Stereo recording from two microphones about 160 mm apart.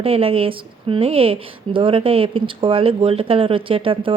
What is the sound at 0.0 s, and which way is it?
Speech, 35° right (ahead or behind).